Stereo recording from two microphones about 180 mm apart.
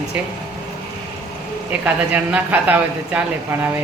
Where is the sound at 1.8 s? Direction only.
10° right (ahead or behind).